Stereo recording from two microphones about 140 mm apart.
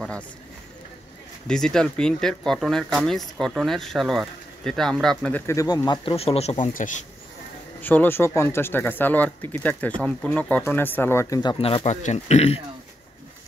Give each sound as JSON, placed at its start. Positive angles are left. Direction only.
{"t": 1.5, "sound": "speech", "side_deg": 5}
{"t": 5.5, "sound": "speech", "side_deg": 20}
{"t": 6.1, "sound": "speech", "side_deg": 45}
{"t": 6.7, "sound": "speech", "side_deg": 70}
{"t": 7.8, "sound": "speech", "side_deg": 15}
{"t": 11.6, "sound": "speech", "side_deg": 45}